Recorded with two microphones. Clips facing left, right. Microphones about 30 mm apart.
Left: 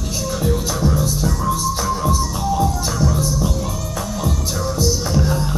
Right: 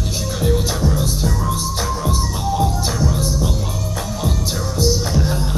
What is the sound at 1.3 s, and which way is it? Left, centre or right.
Music, centre.